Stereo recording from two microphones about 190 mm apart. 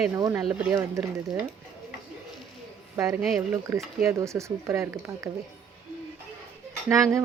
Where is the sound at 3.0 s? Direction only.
15° right (ahead or behind).